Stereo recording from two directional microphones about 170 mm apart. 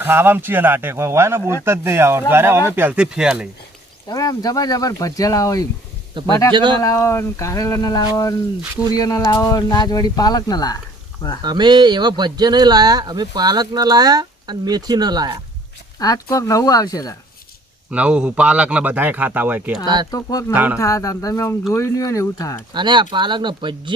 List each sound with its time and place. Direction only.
0.0 s a man's voice: 10° right (ahead or behind)
4.1 s speech: 20° left (ahead or behind)
6.2 s speech: 30° right (ahead or behind)
6.8 s speech: 15° left (ahead or behind)
11.4 s speech: 25° right (ahead or behind)
16.0 s speech: 20° left (ahead or behind)
17.9 s a man's voice: 5° right (ahead or behind)
20.1 s speech: 20° left (ahead or behind)
20.5 s a man's voice: 10° right (ahead or behind)
20.7 s speech: 20° left (ahead or behind)
22.7 s speech: 25° right (ahead or behind)